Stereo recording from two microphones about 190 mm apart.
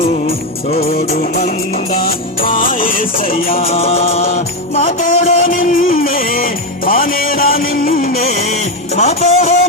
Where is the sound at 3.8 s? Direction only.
30° left (ahead or behind).